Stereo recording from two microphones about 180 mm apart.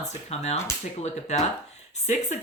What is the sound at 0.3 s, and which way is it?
Speech, 35° left (ahead or behind).